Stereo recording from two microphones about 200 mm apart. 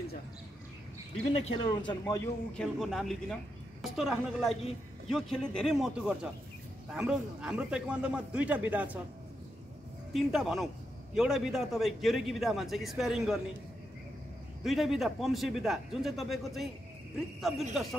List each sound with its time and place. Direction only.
1.5 s a man's voice: 25° left (ahead or behind)
2.5 s speech: 5° left (ahead or behind)
10.1 s speech: centre (ahead or behind)
14.6 s speech: centre (ahead or behind)